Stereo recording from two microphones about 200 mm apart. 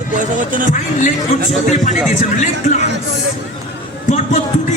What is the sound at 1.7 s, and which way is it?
Speech, 35° left (ahead or behind).